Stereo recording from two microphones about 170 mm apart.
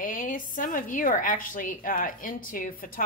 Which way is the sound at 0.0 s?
55° left (ahead or behind).